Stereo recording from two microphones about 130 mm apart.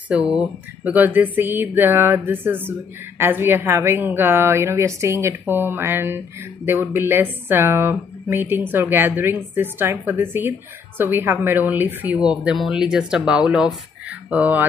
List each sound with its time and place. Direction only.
0.1 s speech: 10° right (ahead or behind)